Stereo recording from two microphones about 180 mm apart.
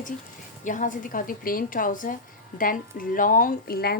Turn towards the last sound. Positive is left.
turn(degrees=55)  # may be behind; listen again after turning